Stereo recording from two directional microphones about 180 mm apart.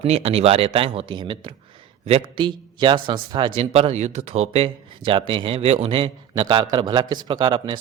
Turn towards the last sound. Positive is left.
turn(degrees=-25)  # may be behind; listen again after turning